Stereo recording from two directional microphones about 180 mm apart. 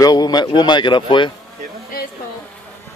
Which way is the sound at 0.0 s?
20° left (ahead or behind).